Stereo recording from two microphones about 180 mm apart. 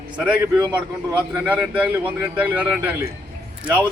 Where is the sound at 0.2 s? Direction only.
10° right (ahead or behind).